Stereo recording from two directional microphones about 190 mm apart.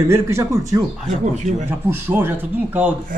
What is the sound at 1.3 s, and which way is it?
Speech, 40° right (ahead or behind).